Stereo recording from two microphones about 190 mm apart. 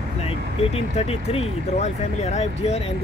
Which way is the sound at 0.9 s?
35° left (ahead or behind).